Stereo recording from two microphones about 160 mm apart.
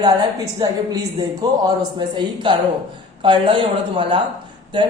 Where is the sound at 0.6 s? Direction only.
25° right (ahead or behind).